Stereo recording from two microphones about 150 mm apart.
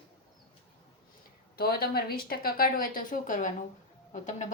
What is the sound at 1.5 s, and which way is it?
A woman's voice, 90° left.